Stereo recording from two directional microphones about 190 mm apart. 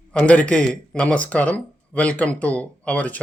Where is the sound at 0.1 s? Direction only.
5° left (ahead or behind).